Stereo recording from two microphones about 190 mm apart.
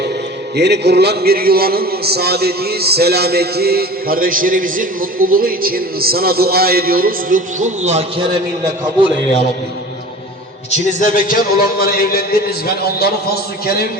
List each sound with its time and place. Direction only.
0.5 s a man's voice: 60° right (ahead or behind); by 8.0 s 40° right (ahead or behind)
10.7 s a man's voice: 45° left (ahead or behind)